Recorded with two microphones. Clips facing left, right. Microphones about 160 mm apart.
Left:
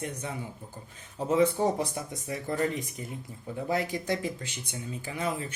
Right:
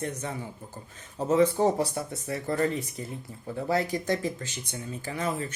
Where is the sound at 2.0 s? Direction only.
15° left (ahead or behind).